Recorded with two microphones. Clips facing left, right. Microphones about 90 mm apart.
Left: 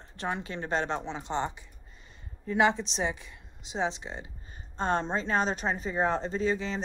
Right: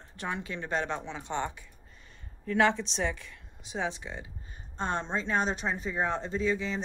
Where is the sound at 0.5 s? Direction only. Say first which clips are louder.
Left 1 dB; 45° left (ahead or behind).